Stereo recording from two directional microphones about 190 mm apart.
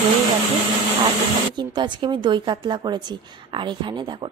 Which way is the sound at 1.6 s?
25° right (ahead or behind).